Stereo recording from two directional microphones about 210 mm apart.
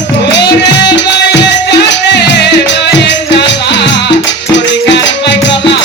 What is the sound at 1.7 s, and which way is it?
Music, 55° left (ahead or behind).